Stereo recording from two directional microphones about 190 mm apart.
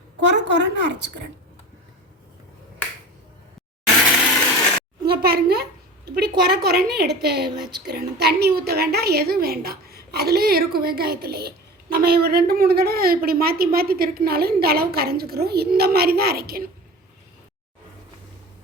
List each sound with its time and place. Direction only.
0.2 s a woman's voice: 70° right (ahead or behind)
5.0 s a sound: 55° right (ahead or behind)
6.1 s a woman's voice: 55° right (ahead or behind)